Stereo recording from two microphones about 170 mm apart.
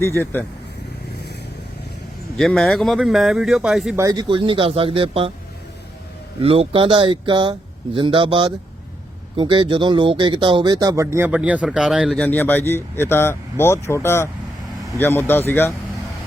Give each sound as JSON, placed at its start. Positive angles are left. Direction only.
{"t": 0.0, "sound": "speech", "side_deg": 10}
{"t": 2.4, "sound": "speech", "side_deg": 0}
{"t": 3.9, "sound": "speech", "side_deg": -20}
{"t": 6.4, "sound": "speech", "side_deg": -35}